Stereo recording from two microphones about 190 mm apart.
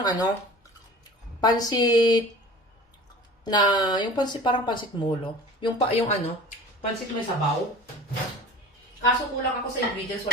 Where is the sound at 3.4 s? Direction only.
20° left (ahead or behind).